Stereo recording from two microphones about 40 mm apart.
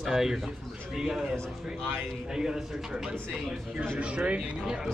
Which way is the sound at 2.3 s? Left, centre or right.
Centre.